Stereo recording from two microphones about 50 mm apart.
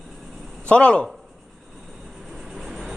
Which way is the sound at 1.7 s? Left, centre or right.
Centre.